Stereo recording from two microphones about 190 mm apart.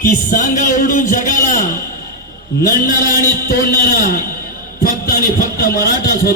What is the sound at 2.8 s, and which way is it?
A man's voice, 50° left (ahead or behind).